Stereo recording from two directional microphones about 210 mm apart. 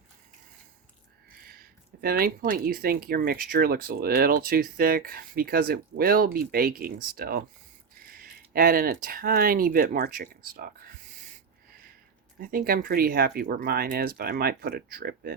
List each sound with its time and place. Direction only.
1.5 s speech: 45° right (ahead or behind)
12.4 s speech: 45° right (ahead or behind)